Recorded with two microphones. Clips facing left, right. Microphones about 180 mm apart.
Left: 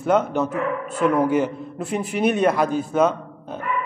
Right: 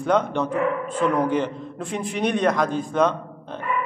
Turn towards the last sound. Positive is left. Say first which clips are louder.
# left 1 dB
turn(degrees=5)  # may be behind; listen again after turning